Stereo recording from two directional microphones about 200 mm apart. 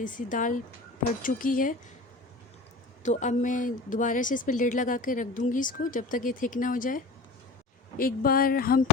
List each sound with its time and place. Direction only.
0.0 s speech: 40° left (ahead or behind)
3.0 s speech: 35° left (ahead or behind)